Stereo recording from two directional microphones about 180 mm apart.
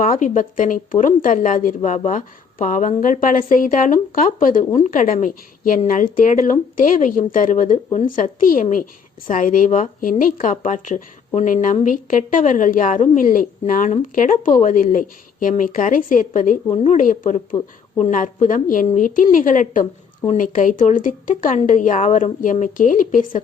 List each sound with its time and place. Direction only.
0.0 s a woman's voice: 45° left (ahead or behind)